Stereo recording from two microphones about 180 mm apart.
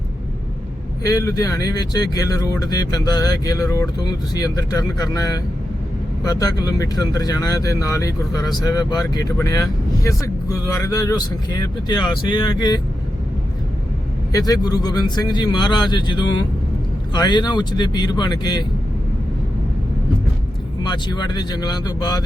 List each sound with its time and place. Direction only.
1.0 s speech: 20° left (ahead or behind)
14.3 s speech: 20° left (ahead or behind)
20.8 s speech: 25° left (ahead or behind)